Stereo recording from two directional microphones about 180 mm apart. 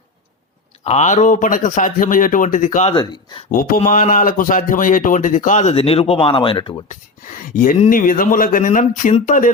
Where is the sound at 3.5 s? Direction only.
50° left (ahead or behind); by 6.9 s 30° left (ahead or behind).